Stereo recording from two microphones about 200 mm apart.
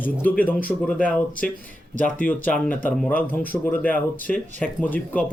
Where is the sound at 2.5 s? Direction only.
10° left (ahead or behind).